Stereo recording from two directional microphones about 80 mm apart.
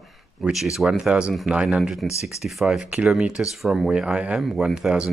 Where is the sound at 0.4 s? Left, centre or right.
Centre.